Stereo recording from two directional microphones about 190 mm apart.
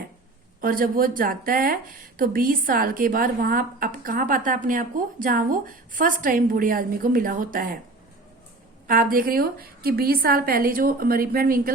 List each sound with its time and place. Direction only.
0.6 s speech: 50° right (ahead or behind)
8.9 s speech: 50° right (ahead or behind)